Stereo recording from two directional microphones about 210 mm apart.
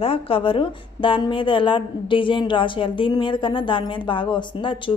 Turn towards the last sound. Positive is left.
turn(degrees=25)  # may be behind; listen again after turning